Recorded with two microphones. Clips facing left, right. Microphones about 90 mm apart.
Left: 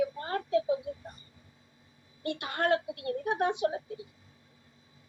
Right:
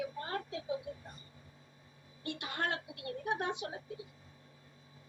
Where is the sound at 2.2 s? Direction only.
60° left (ahead or behind).